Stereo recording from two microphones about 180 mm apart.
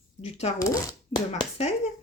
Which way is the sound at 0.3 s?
35° left (ahead or behind).